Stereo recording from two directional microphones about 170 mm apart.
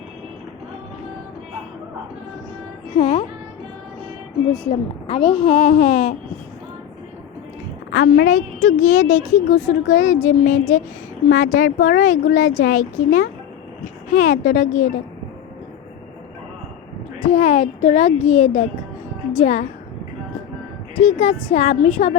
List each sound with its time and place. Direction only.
3.0 s a woman's voice: 30° left (ahead or behind)
4.7 s a woman's voice: 30° left (ahead or behind)
7.9 s a woman's voice: 90° left
8.3 s speech: 45° left (ahead or behind)
17.2 s a woman's voice: 35° left (ahead or behind)
21.0 s a woman's voice: 35° left (ahead or behind)